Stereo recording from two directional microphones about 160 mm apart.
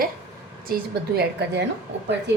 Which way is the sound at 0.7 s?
80° right.